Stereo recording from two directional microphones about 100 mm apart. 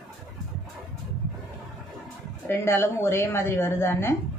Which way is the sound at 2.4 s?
25° left (ahead or behind).